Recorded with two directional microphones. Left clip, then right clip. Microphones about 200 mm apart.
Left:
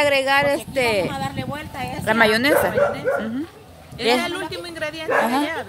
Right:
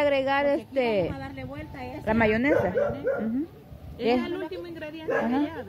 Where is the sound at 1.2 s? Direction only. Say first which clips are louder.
Left 10 dB; 10° right (ahead or behind).